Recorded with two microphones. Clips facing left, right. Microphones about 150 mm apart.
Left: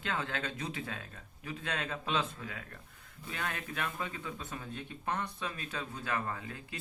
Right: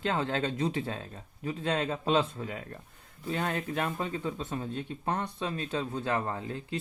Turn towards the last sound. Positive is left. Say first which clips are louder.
# right 6 dB
turn(degrees=-30)  # may be behind; listen again after turning